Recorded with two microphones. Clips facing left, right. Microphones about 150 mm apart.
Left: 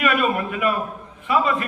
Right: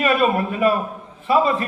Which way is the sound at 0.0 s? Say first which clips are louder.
Right 3 dB; 30° right (ahead or behind).